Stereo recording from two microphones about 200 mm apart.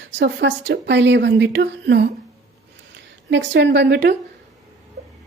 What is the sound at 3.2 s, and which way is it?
Speech, 60° right (ahead or behind).